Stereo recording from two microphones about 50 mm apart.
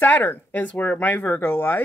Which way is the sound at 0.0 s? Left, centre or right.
Left.